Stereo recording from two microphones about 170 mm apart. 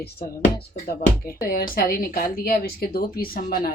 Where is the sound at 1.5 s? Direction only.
60° left (ahead or behind).